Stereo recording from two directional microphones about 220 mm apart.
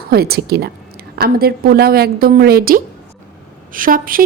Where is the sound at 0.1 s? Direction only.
45° right (ahead or behind).